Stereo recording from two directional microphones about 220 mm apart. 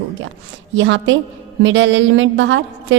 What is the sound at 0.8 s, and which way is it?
A woman's voice, 55° right (ahead or behind).